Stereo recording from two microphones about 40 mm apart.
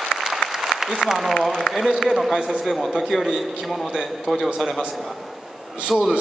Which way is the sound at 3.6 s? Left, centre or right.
Centre.